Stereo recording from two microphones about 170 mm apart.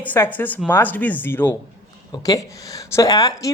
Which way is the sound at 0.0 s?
10° left (ahead or behind).